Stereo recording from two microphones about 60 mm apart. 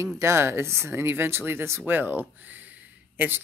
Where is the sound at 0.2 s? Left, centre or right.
Right.